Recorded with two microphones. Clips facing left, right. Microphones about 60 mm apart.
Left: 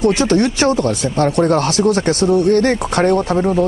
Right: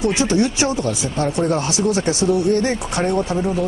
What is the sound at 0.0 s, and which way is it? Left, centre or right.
Speech, left.